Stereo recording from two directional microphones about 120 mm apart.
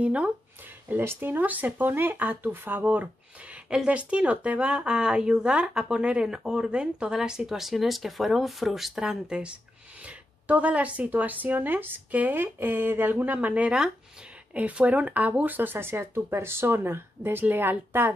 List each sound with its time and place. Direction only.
0.0 s speech: 10° right (ahead or behind)